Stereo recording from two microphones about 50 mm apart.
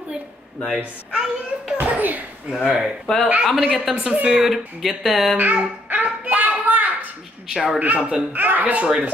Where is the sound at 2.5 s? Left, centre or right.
Centre.